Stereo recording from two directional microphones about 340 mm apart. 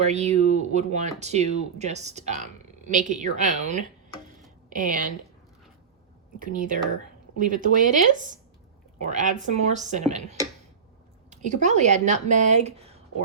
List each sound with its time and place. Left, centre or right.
0.0 s speech: centre
6.4 s speech: right